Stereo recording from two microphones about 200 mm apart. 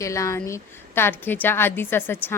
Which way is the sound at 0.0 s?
15° left (ahead or behind).